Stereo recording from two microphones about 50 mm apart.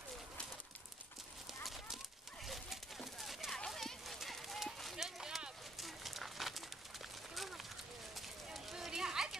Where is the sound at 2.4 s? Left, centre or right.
Centre.